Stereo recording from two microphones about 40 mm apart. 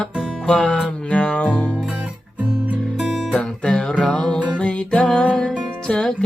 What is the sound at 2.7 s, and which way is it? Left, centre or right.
Music, left.